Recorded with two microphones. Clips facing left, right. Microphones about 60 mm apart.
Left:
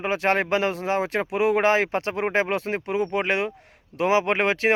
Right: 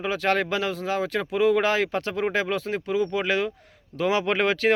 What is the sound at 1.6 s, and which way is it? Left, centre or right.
Speech, left.